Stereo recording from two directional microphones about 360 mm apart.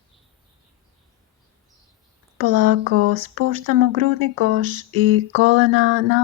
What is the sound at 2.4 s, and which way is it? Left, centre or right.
Speech, right.